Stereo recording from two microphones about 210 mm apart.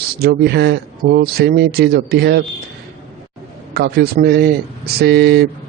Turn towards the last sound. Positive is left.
turn(degrees=-50)  # may be behind; listen again after turning